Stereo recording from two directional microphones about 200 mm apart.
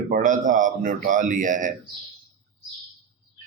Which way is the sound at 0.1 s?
40° right (ahead or behind).